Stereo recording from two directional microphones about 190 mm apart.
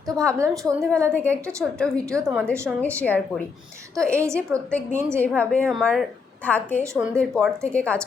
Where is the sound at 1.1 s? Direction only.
5° left (ahead or behind).